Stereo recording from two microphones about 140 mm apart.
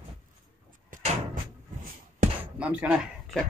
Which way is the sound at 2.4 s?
10° right (ahead or behind).